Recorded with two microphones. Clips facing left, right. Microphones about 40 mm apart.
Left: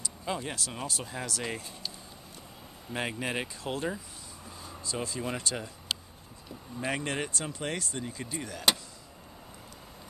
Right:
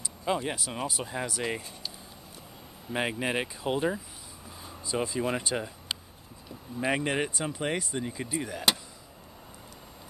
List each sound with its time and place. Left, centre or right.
0.0 s speech: centre
2.9 s speech: centre
6.8 s speech: centre